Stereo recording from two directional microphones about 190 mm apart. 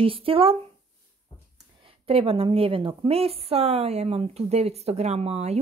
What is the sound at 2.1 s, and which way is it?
A woman's voice, 30° right (ahead or behind).